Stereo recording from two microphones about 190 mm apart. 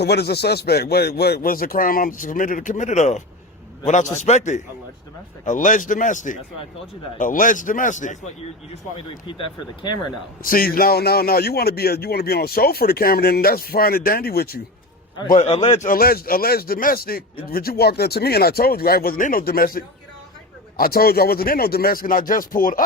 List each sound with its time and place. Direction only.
0.0 s a man's voice: 60° left (ahead or behind); by 8.2 s 40° left (ahead or behind)
8.7 s speech: 25° left (ahead or behind)
10.4 s a man's voice: 50° left (ahead or behind)
15.3 s a man's voice: 35° left (ahead or behind)